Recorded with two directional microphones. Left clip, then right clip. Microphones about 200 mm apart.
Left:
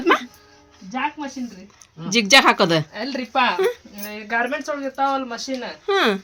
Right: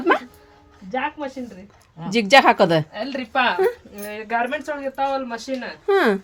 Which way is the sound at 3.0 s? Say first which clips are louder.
Even; centre (ahead or behind).